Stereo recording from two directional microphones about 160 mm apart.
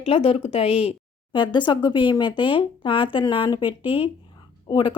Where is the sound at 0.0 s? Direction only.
35° left (ahead or behind).